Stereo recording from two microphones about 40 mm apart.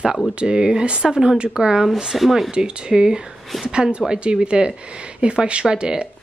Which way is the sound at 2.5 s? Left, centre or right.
Right.